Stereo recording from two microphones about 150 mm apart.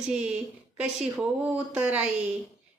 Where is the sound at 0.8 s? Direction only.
10° right (ahead or behind).